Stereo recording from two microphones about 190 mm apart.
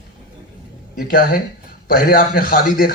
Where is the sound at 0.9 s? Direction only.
50° left (ahead or behind).